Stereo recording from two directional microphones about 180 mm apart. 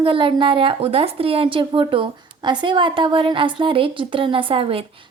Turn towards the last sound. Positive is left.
turn(degrees=-30)  # may be behind; listen again after turning